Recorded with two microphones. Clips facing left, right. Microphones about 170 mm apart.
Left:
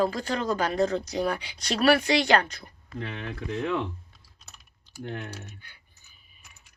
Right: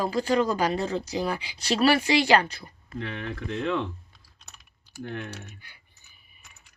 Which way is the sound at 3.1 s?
15° left (ahead or behind).